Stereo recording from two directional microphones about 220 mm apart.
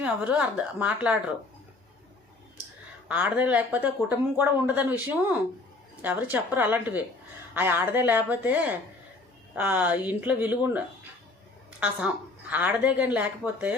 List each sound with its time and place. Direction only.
0.0 s speech: 5° right (ahead or behind)
3.1 s a woman's voice: 5° right (ahead or behind)
11.8 s a woman's voice: 5° right (ahead or behind)